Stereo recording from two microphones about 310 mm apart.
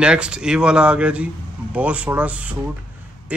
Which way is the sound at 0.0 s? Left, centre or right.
Centre.